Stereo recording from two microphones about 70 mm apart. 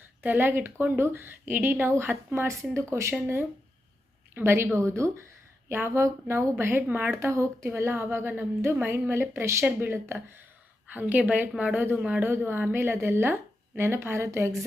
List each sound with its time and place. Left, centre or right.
0.2 s a woman's voice: right
7.1 s a woman's voice: right